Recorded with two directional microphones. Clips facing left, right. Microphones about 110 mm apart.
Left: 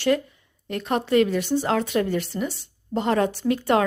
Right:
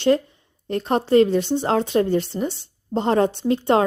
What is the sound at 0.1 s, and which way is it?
A woman's voice, 30° right (ahead or behind).